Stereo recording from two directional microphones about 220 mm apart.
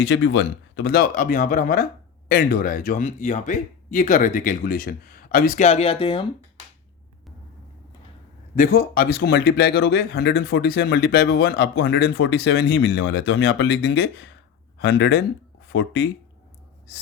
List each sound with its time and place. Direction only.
0.0 s speech: 55° left (ahead or behind); by 6.2 s 25° left (ahead or behind)
8.5 s speech: 40° left (ahead or behind); by 16.0 s 55° left (ahead or behind)